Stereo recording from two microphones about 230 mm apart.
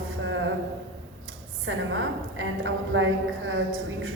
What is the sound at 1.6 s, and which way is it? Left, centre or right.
A woman's voice, right.